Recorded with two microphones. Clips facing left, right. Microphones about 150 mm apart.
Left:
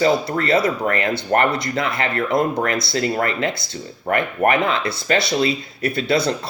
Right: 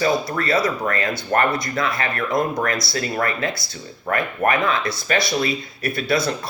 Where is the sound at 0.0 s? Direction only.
25° left (ahead or behind).